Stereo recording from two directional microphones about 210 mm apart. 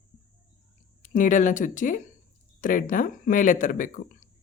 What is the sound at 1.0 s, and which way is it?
Speech, 40° left (ahead or behind).